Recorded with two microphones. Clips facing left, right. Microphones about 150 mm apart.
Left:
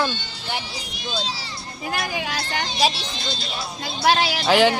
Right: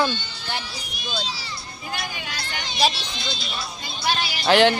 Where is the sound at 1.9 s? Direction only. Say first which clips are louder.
Left 6 dB; 90° left.